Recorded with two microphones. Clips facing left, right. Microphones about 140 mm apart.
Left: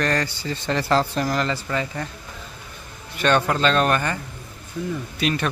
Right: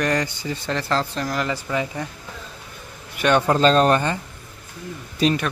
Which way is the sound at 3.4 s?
35° right (ahead or behind).